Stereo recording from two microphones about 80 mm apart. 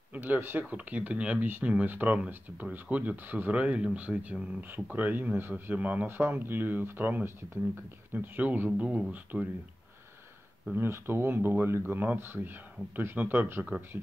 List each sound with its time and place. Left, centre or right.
0.1 s speech: right
10.8 s speech: right